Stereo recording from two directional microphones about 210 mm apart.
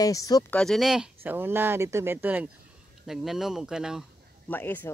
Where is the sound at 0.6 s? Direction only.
Centre (ahead or behind).